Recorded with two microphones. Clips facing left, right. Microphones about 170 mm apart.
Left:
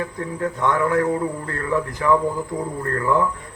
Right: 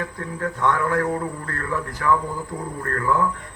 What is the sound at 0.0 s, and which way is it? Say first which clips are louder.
A man's voice: left 3 dB; 20° left (ahead or behind).